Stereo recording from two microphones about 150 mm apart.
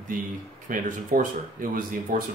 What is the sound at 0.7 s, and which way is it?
Speech, 65° right (ahead or behind).